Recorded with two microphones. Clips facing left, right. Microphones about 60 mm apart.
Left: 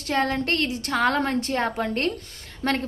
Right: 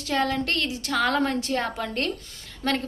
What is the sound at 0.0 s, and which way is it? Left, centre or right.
A woman's voice, left.